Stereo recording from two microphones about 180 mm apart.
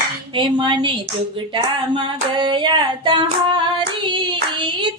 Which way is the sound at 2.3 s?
25° right (ahead or behind).